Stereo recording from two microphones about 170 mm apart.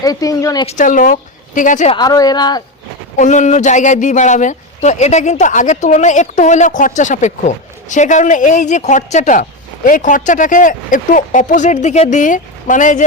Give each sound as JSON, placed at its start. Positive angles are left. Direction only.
{"t": 0.0, "sound": "speech", "side_deg": 20}
{"t": 0.7, "sound": "a woman's voice", "side_deg": 50}
{"t": 1.9, "sound": "speech", "side_deg": 25}
{"t": 3.2, "sound": "a man's voice", "side_deg": 45}